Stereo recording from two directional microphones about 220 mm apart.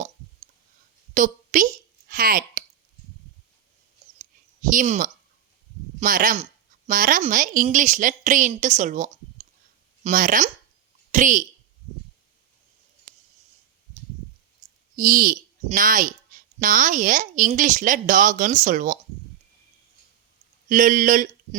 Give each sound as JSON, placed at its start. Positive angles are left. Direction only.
{"t": 1.1, "sound": "a sound", "side_deg": -35}
{"t": 4.7, "sound": "a woman's voice", "side_deg": -35}
{"t": 14.9, "sound": "a woman's voice", "side_deg": -40}
{"t": 20.7, "sound": "speech", "side_deg": -35}